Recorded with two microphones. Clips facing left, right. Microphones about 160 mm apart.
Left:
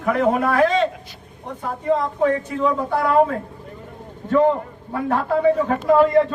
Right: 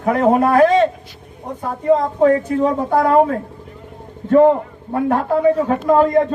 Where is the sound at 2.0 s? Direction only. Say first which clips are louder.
Right 5 dB; 40° right (ahead or behind).